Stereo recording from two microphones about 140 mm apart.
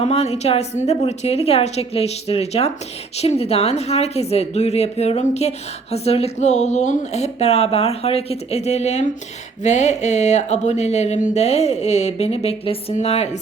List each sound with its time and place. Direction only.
0.0 s speech: 50° left (ahead or behind)